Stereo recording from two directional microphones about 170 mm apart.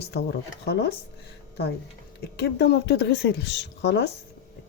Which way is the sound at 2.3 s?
75° left (ahead or behind).